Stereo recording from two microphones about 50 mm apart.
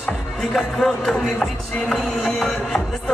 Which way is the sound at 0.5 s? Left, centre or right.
Centre.